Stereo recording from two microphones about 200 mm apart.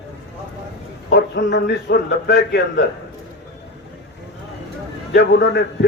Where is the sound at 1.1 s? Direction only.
55° left (ahead or behind).